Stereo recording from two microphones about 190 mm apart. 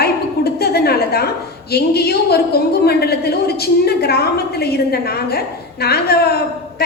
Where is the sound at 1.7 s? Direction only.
55° left (ahead or behind).